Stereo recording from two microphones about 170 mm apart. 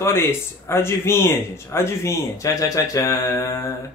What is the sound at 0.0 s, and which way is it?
Speech, 15° left (ahead or behind).